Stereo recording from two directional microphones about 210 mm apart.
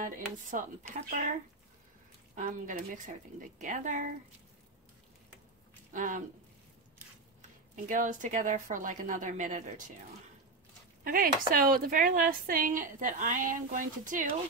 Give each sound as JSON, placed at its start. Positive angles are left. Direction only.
{"t": 0.0, "sound": "speech", "side_deg": -40}
{"t": 2.3, "sound": "speech", "side_deg": -40}
{"t": 5.9, "sound": "speech", "side_deg": -40}
{"t": 7.9, "sound": "speech", "side_deg": -35}
{"t": 11.1, "sound": "speech", "side_deg": -40}